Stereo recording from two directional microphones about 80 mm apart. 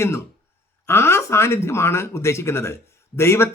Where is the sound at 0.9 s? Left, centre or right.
Left.